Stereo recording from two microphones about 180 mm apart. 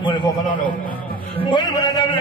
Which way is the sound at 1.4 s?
25° left (ahead or behind).